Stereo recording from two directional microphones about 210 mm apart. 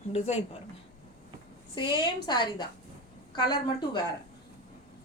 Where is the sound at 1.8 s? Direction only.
20° left (ahead or behind).